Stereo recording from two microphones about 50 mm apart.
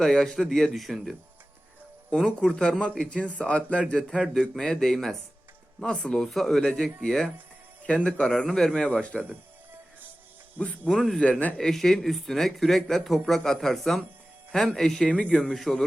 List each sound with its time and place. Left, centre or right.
0.0 s speech: centre
0.7 s speech: centre
2.1 s speech: centre
2.5 s speech: centre
3.9 s speech: centre
6.6 s speech: centre
8.3 s speech: centre; by 9.2 s left
10.6 s speech: left
10.9 s speech: centre
11.2 s speech: left
11.5 s speech: centre